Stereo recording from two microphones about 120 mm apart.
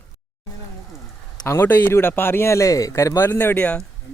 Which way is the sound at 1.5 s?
15° left (ahead or behind).